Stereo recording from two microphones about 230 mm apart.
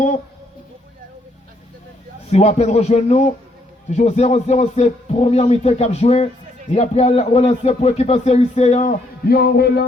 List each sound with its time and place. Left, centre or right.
2.3 s speech: left